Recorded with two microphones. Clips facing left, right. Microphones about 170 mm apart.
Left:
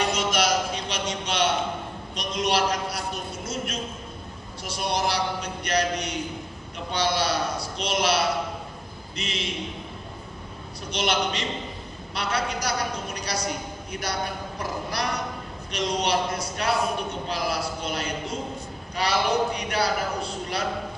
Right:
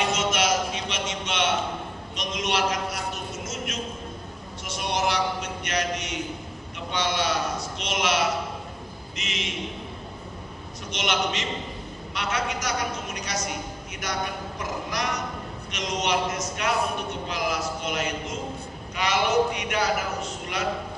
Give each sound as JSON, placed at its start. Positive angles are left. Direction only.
{"t": 0.3, "sound": "a sound", "side_deg": 35}
{"t": 2.1, "sound": "a man's voice", "side_deg": 35}
{"t": 6.9, "sound": "a man's voice", "side_deg": 35}
{"t": 10.9, "sound": "a man's voice", "side_deg": 35}
{"t": 14.6, "sound": "a sound", "side_deg": 35}
{"t": 15.7, "sound": "a man's voice", "side_deg": 35}